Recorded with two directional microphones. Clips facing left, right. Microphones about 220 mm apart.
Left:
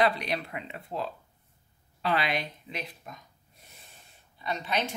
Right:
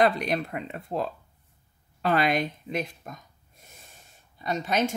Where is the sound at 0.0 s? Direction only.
45° right (ahead or behind).